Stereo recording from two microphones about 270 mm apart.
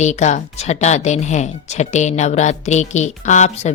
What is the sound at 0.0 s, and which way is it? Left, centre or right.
A woman's voice, left.